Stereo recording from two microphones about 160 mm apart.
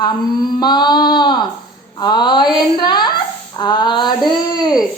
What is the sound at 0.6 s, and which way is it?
A child's voice, 25° left (ahead or behind).